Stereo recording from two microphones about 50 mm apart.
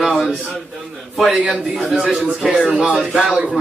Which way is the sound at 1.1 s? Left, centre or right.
Centre.